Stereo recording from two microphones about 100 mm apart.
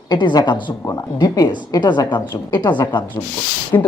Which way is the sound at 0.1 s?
45° left (ahead or behind).